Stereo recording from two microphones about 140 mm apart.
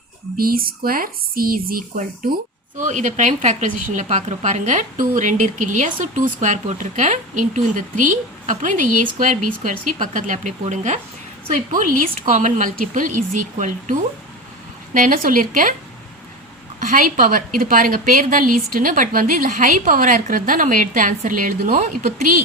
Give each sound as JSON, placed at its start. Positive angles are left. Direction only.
{"t": 0.3, "sound": "speech", "side_deg": -90}
{"t": 2.7, "sound": "a woman's voice", "side_deg": -60}
{"t": 11.7, "sound": "a woman's voice", "side_deg": -75}
{"t": 12.3, "sound": "a woman's voice", "side_deg": -60}
{"t": 14.9, "sound": "a woman's voice", "side_deg": -75}
{"t": 16.8, "sound": "a woman's voice", "side_deg": -70}